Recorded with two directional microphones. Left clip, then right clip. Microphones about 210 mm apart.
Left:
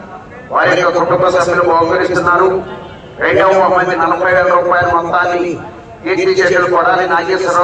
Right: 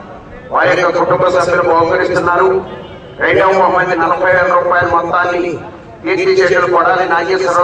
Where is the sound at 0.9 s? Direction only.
5° right (ahead or behind).